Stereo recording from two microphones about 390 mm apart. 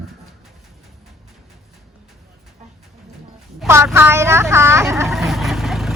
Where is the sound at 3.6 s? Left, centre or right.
Centre.